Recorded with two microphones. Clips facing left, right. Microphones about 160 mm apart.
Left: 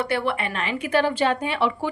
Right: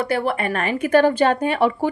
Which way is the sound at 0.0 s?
40° right (ahead or behind).